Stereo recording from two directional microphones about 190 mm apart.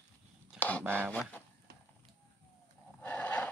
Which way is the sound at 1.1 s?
10° left (ahead or behind).